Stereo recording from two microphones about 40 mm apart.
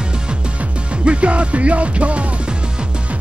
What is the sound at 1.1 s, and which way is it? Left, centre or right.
Music, right.